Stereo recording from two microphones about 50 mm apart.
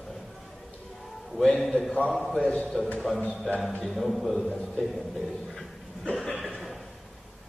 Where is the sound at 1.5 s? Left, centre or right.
Centre.